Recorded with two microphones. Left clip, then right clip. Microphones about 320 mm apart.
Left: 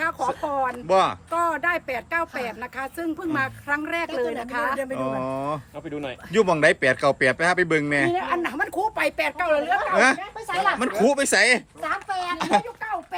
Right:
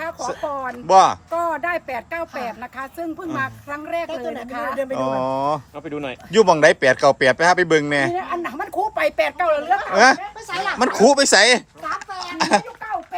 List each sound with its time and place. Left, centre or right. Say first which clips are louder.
0.0 s speech: left 1 dB; centre
4.9 s a man's voice: right 5 dB; centre
5.9 s speech: right 4 dB; right
6.3 s a man's voice: right 5 dB; centre
11.9 s speech: left 1 dB; left
12.4 s a man's voice: right 5 dB; centre